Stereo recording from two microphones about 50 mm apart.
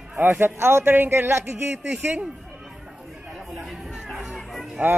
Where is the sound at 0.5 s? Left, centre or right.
Right.